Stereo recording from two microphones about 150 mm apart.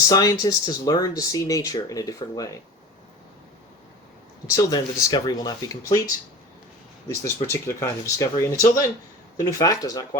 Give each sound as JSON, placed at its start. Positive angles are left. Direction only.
{"t": 0.1, "sound": "speech", "side_deg": 25}
{"t": 4.4, "sound": "speech", "side_deg": 20}
{"t": 7.4, "sound": "speech", "side_deg": 20}